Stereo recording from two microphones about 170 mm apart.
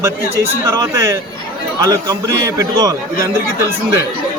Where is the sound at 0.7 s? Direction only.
15° right (ahead or behind).